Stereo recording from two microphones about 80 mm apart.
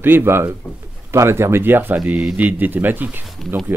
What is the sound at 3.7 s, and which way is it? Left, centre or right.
Speech, right.